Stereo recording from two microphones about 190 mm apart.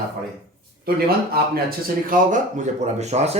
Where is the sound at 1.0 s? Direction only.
55° right (ahead or behind); by 3.3 s 35° right (ahead or behind).